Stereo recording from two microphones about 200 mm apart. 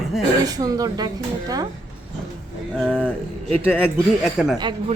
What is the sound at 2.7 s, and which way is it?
Speech, centre (ahead or behind).